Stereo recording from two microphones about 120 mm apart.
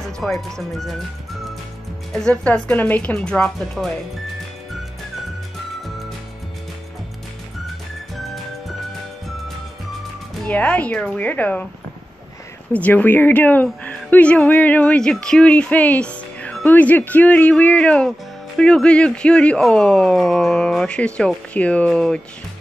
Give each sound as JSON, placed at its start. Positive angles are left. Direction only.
{"t": 0.2, "sound": "speech", "side_deg": 0}
{"t": 2.1, "sound": "speech", "side_deg": 5}
{"t": 10.4, "sound": "speech", "side_deg": 10}
{"t": 12.7, "sound": "speech", "side_deg": 15}